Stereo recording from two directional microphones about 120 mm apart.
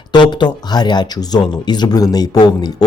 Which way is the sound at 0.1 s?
40° left (ahead or behind).